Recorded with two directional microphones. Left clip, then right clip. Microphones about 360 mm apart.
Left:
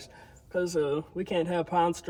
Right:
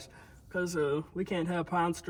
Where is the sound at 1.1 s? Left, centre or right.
Right.